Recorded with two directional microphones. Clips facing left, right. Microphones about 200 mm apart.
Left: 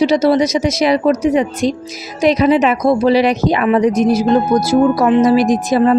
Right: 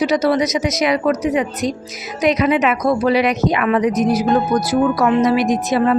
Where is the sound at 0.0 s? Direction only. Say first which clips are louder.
Left 4 dB; 30° left (ahead or behind).